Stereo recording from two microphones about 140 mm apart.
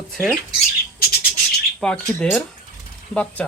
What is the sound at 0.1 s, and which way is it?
Speech, 5° right (ahead or behind).